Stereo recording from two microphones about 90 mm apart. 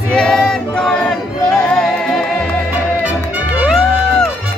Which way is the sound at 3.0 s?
15° right (ahead or behind).